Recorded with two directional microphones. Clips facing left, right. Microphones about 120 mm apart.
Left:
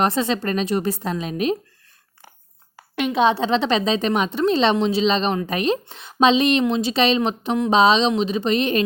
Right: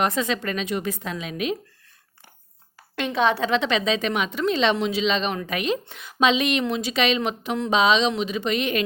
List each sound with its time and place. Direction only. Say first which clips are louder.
0.0 s a woman's voice: left 3 dB; 30° left (ahead or behind)
2.9 s a woman's voice: left 4 dB; 15° left (ahead or behind); by 8.8 s 30° left (ahead or behind)